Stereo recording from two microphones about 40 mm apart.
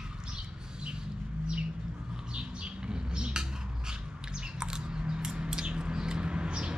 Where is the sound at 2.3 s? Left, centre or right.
Right.